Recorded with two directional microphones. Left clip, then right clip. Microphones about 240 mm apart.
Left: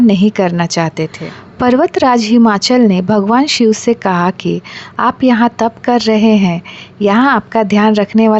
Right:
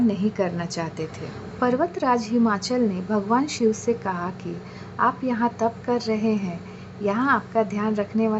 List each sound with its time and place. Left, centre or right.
0.1 s a woman's voice: left